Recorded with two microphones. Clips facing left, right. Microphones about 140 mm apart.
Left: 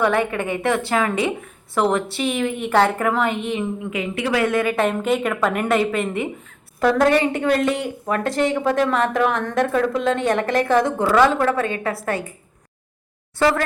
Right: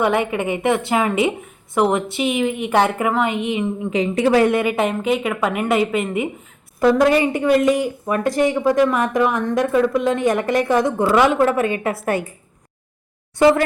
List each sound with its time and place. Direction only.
0.0 s a woman's voice: 15° right (ahead or behind)
3.8 s speech: 30° right (ahead or behind)
4.5 s a woman's voice: 15° right (ahead or behind)
13.4 s a woman's voice: 15° right (ahead or behind)